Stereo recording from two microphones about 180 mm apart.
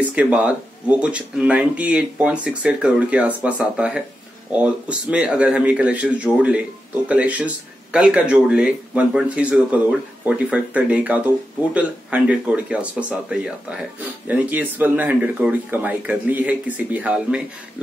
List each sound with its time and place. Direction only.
0.1 s speech: 5° right (ahead or behind)